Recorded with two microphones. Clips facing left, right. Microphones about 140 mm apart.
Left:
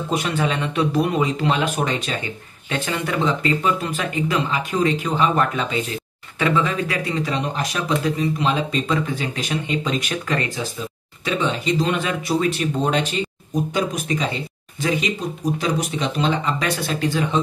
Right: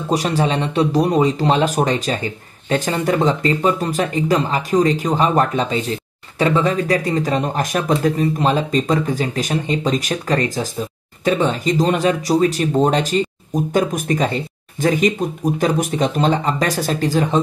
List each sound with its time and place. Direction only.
0.1 s speech: 35° right (ahead or behind)